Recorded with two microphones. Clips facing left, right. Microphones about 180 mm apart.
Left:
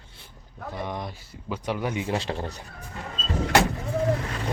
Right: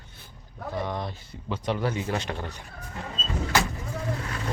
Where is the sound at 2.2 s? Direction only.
30° left (ahead or behind).